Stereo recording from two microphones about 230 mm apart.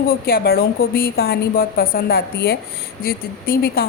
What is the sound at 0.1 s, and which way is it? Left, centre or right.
A woman's voice, left.